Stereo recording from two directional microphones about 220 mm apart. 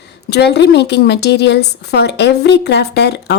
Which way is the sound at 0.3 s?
50° left (ahead or behind).